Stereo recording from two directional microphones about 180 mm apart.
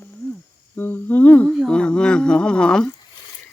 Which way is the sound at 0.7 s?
10° left (ahead or behind).